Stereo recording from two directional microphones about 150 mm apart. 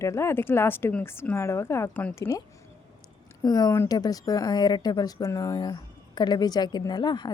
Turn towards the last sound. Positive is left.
turn(degrees=30)  # may be behind; listen again after turning